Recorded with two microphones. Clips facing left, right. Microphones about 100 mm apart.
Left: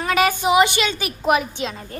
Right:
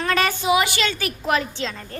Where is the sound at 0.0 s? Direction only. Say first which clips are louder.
Left 3 dB; 10° left (ahead or behind).